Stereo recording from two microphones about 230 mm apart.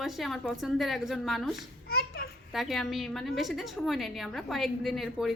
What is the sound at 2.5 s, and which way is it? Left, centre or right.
A woman's voice, centre.